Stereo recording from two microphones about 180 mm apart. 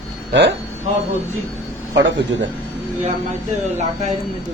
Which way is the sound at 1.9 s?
85° right.